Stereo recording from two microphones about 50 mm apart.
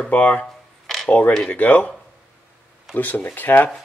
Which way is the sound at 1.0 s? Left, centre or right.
Left.